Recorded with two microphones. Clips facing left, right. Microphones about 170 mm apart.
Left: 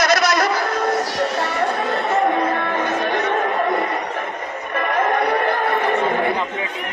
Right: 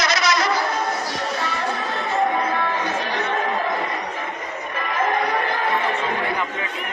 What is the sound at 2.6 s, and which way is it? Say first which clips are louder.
Music: left 3 dB; 55° left (ahead or behind).